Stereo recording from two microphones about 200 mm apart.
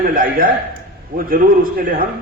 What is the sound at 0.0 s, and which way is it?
A man's voice, 45° right (ahead or behind).